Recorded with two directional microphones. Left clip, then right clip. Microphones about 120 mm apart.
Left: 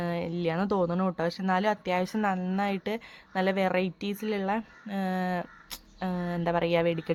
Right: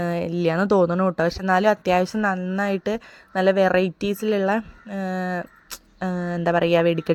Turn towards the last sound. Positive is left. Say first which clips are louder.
# right 7 dB
turn(degrees=-45)  # may be behind; listen again after turning